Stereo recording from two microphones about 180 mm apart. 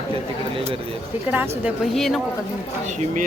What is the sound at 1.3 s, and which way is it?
Speech, 10° right (ahead or behind).